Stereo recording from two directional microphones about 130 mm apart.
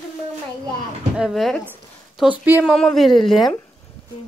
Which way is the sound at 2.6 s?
5° left (ahead or behind).